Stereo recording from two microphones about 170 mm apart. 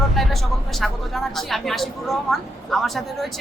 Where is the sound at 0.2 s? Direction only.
Centre (ahead or behind).